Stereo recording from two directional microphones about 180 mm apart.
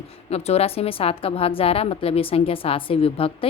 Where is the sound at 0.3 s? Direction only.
35° left (ahead or behind).